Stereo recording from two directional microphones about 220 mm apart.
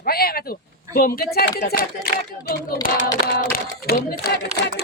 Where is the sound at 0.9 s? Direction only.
40° left (ahead or behind).